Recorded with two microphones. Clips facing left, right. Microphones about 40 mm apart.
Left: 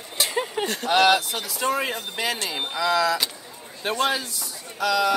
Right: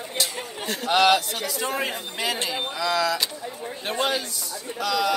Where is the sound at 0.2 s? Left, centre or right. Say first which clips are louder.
Left 6 dB; left.